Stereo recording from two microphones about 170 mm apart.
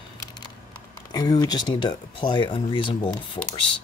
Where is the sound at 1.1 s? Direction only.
20° left (ahead or behind).